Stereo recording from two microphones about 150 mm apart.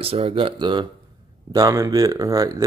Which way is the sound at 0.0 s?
40° right (ahead or behind).